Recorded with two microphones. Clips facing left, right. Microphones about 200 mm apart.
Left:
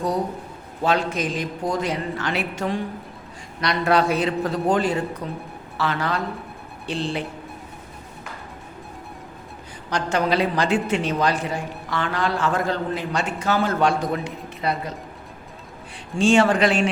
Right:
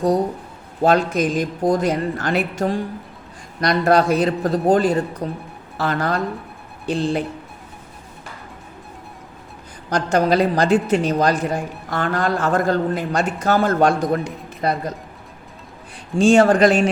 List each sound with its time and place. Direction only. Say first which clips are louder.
0.8 s a woman's voice: right 5 dB; 45° right (ahead or behind)
9.9 s a woman's voice: right 4 dB; 40° right (ahead or behind)
16.1 s a woman's voice: right 4 dB; 40° right (ahead or behind)